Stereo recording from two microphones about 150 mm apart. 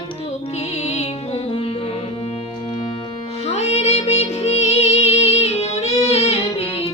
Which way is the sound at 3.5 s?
45° left (ahead or behind).